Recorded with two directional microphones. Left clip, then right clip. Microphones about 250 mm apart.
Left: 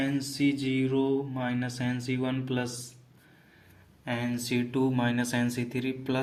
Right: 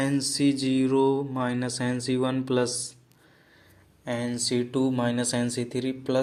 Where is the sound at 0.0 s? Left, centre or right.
Right.